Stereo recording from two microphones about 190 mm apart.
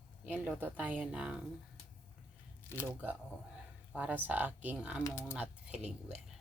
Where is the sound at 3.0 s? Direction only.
5° right (ahead or behind).